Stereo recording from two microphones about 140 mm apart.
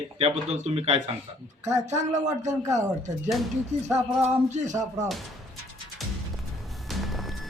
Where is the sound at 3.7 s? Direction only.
50° right (ahead or behind).